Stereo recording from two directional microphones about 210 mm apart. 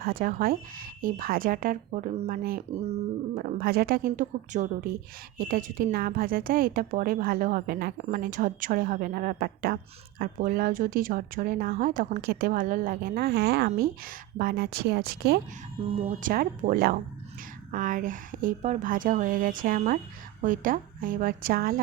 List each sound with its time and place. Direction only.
0.0 s speech: 45° right (ahead or behind)
2.4 s speech: 45° right (ahead or behind)
16.0 s a woman's voice: 35° right (ahead or behind)